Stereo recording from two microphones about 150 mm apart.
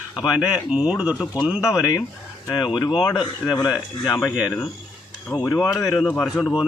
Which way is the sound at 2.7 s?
25° left (ahead or behind).